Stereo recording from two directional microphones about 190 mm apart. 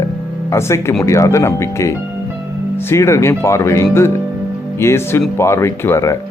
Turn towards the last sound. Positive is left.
turn(degrees=15)  # may be behind; listen again after turning